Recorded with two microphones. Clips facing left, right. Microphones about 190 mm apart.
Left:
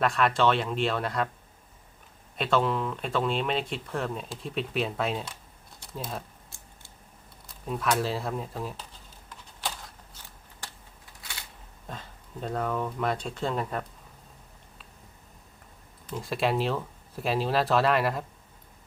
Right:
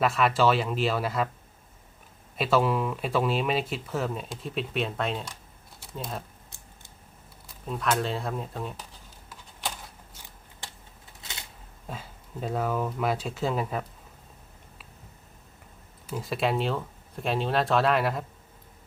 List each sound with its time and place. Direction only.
0.0 s speech: 5° right (ahead or behind)
2.4 s speech: 5° right (ahead or behind)
7.7 s speech: 5° left (ahead or behind)
11.2 s a sound: 25° right (ahead or behind)
11.9 s speech: 5° right (ahead or behind)
16.0 s speech: 5° right (ahead or behind)